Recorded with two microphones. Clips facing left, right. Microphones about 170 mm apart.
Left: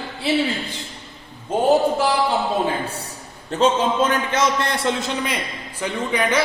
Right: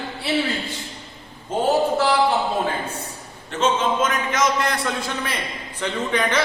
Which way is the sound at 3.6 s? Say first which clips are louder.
Left 2 dB; 35° left (ahead or behind).